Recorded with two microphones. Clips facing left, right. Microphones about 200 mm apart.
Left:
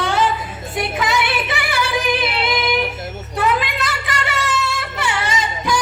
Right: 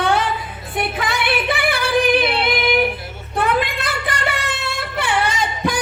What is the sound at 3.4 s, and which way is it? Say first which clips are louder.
Singing: even; 55° right (ahead or behind).